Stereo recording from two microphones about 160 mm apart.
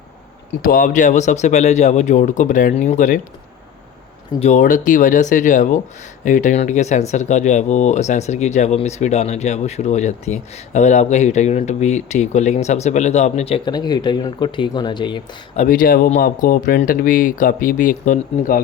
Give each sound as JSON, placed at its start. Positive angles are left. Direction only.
{"t": 0.6, "sound": "speech", "side_deg": 60}
{"t": 4.4, "sound": "speech", "side_deg": 50}
{"t": 13.7, "sound": "speech", "side_deg": 25}
{"t": 15.5, "sound": "speech", "side_deg": 60}